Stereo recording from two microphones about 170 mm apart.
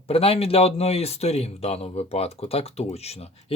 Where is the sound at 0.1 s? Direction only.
35° left (ahead or behind).